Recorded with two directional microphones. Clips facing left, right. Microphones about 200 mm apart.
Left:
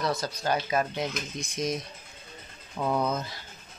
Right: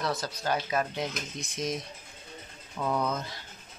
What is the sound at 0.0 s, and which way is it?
Speech, 5° right (ahead or behind).